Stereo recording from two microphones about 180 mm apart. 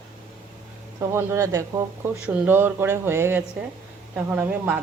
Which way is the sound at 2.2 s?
5° right (ahead or behind).